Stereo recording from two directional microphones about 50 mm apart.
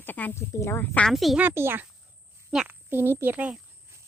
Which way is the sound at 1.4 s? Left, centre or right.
Right.